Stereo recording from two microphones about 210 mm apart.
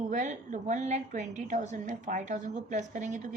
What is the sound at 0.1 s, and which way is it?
A woman's voice, 35° right (ahead or behind).